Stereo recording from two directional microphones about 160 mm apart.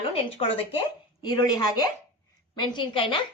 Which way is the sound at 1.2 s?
25° left (ahead or behind).